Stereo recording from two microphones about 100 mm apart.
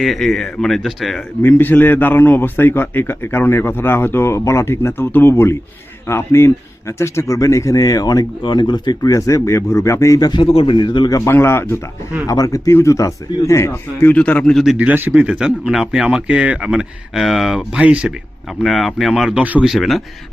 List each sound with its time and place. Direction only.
0.0 s speech: 5° left (ahead or behind)
1.4 s a man's voice: 20° left (ahead or behind); by 10.4 s 40° left (ahead or behind)
10.4 s a man's voice: 65° left (ahead or behind); by 11.2 s 45° left (ahead or behind)
11.3 s a man's voice: 25° left (ahead or behind)
14.1 s speech: 15° left (ahead or behind)
14.5 s speech: 5° right (ahead or behind)
14.8 s speech: 15° right (ahead or behind)
18.6 s speech: centre (ahead or behind)
19.6 s speech: centre (ahead or behind)